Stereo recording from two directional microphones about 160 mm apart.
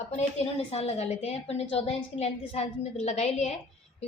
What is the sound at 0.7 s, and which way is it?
A woman's voice, 40° left (ahead or behind).